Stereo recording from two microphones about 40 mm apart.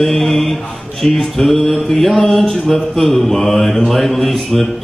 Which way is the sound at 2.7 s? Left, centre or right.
Centre.